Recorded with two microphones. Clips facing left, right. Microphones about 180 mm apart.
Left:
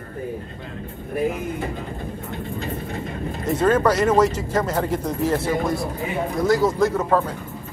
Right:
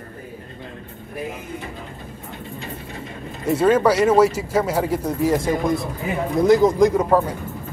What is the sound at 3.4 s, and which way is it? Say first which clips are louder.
A man's voice: right 2 dB; 10° right (ahead or behind).